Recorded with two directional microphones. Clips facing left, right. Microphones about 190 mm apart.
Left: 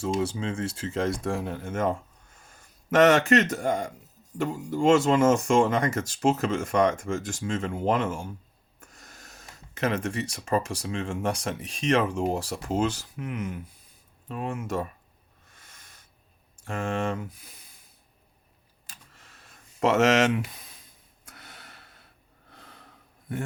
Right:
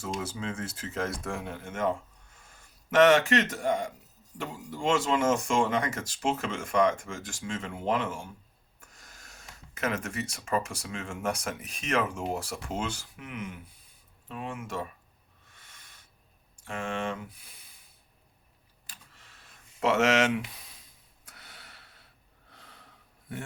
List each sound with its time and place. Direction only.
0.2 s speech: 30° left (ahead or behind)
2.9 s speech: 40° left (ahead or behind)
15.5 s a sound: 45° left (ahead or behind)
16.6 s speech: 40° left (ahead or behind)
19.8 s speech: 40° left (ahead or behind)
21.2 s snort: 50° left (ahead or behind)